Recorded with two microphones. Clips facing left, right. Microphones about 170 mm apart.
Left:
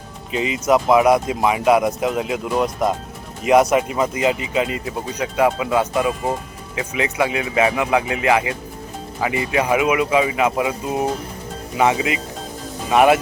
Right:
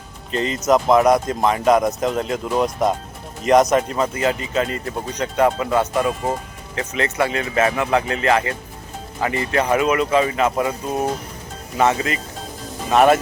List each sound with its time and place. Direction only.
0.3 s speech: 5° left (ahead or behind)